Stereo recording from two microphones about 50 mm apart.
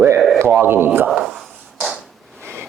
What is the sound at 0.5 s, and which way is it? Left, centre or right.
Speech, right.